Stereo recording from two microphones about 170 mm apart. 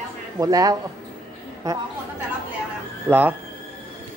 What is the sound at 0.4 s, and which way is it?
Speech, 20° right (ahead or behind).